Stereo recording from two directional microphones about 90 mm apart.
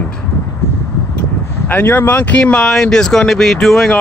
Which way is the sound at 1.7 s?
20° left (ahead or behind).